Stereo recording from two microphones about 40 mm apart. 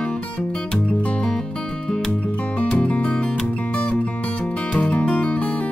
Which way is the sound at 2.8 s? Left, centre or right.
Left.